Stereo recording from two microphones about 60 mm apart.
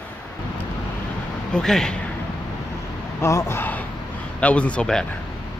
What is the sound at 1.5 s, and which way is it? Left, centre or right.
Speech, centre.